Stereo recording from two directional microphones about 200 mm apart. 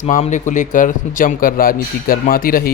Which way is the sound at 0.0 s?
35° left (ahead or behind).